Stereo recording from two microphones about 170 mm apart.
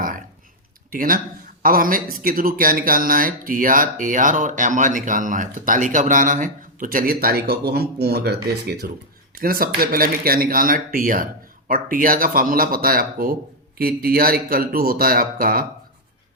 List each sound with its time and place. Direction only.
0.9 s a man's voice: 55° right (ahead or behind); by 8.9 s 70° right (ahead or behind)
9.4 s a man's voice: 60° right (ahead or behind)